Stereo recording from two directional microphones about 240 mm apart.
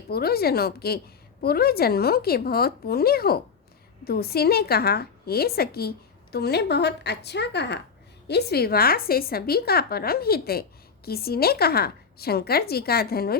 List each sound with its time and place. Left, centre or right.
0.1 s a woman's voice: left